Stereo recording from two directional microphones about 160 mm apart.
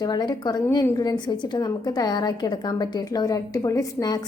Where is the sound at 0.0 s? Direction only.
25° left (ahead or behind).